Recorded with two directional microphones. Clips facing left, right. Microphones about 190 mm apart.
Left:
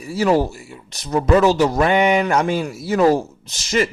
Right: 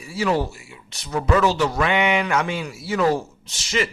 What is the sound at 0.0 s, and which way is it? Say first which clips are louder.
Speech: left 5 dB; 40° left (ahead or behind).